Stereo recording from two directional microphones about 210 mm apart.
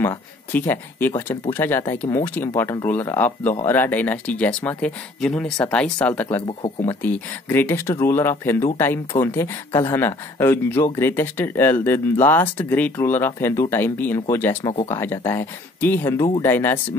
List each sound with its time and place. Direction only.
0.0 s speech: 10° left (ahead or behind)
14.6 s speech: 20° left (ahead or behind)
14.9 s speech: 10° left (ahead or behind)